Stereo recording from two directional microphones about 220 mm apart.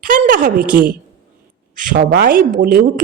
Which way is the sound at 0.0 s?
40° right (ahead or behind).